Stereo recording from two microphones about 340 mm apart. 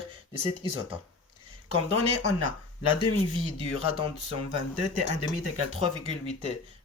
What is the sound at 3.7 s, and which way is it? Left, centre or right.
Speech, left.